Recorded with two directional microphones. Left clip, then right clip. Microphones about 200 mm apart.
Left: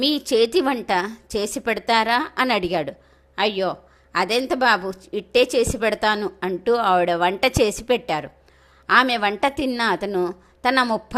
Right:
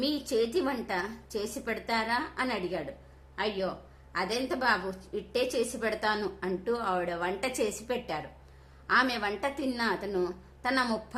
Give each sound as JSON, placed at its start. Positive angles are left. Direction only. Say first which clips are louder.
{"t": 0.0, "sound": "a woman's voice", "louder": "left 10 dB", "side_deg": 35}